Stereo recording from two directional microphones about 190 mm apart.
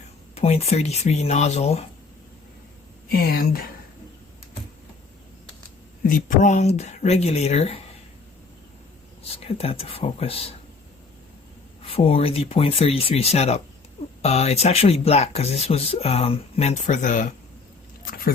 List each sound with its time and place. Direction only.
0.3 s speech: 35° left (ahead or behind)
3.1 s speech: 50° left (ahead or behind)
6.0 s speech: 45° left (ahead or behind)
9.6 s speech: 30° left (ahead or behind)
11.9 s speech: 30° left (ahead or behind)